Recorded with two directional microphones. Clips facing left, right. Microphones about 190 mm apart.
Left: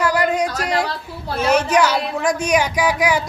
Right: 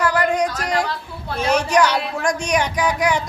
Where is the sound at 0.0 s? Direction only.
10° left (ahead or behind).